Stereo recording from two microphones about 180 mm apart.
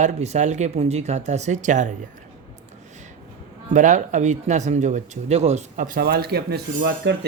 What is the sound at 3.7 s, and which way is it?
Speech, 45° right (ahead or behind).